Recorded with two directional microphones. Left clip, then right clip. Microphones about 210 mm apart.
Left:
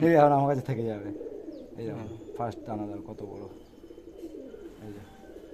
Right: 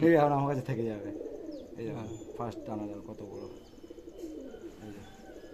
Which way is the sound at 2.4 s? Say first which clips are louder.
Left 4 dB; 30° left (ahead or behind).